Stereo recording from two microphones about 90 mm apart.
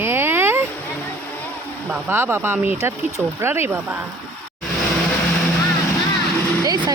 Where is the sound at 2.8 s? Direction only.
30° right (ahead or behind).